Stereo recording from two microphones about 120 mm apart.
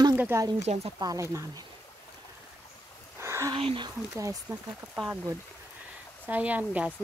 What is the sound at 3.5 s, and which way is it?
Speech, 45° right (ahead or behind).